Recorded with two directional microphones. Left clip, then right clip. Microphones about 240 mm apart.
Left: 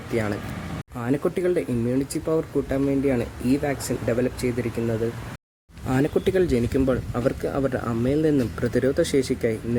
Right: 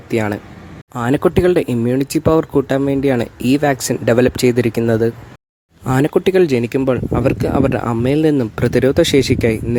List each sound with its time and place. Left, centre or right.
0.1 s speech: right